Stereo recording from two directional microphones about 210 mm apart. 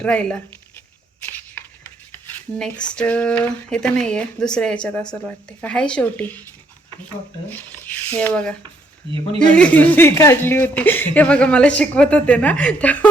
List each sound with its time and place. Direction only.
0.0 s speech: 5° left (ahead or behind)
1.2 s a sound: 10° left (ahead or behind)
2.6 s speech: 5° left (ahead or behind)
7.5 s speech: 5° left (ahead or behind)